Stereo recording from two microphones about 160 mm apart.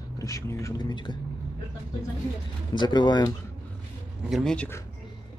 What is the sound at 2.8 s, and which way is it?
Speech, 30° left (ahead or behind).